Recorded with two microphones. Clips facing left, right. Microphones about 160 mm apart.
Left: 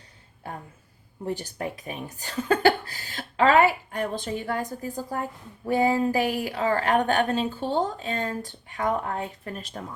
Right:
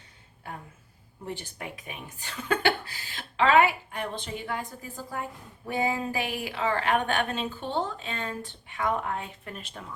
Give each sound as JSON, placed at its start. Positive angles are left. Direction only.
{"t": 1.2, "sound": "a woman's voice", "side_deg": 40}